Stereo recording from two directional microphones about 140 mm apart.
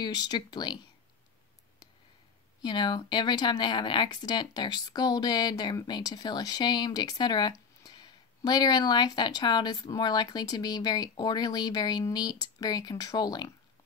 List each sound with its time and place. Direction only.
0.0 s speech: 30° left (ahead or behind)
2.6 s speech: 30° left (ahead or behind)